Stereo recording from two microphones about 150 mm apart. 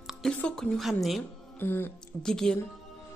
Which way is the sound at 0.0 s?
5° left (ahead or behind).